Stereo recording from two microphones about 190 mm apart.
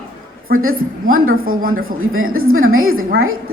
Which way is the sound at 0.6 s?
90° right.